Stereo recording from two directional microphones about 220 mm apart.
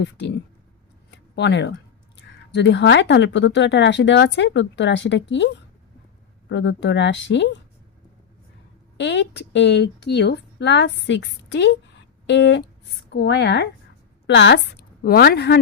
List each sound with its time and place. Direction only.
0.0 s speech: 50° left (ahead or behind)
1.1 s a sound: 50° left (ahead or behind)
2.1 s speech: 55° left (ahead or behind)
6.5 s speech: 55° left (ahead or behind)
9.0 s a woman's voice: 55° left (ahead or behind)